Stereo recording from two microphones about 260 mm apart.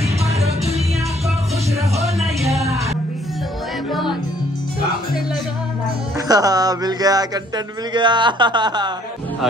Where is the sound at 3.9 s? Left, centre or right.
Centre.